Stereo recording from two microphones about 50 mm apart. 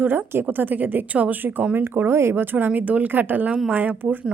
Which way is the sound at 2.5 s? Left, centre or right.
Right.